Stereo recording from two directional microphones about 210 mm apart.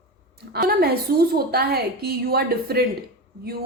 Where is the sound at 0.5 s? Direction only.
45° right (ahead or behind).